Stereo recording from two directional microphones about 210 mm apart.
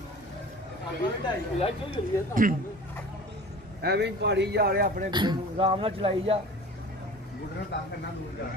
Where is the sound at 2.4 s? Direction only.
40° right (ahead or behind).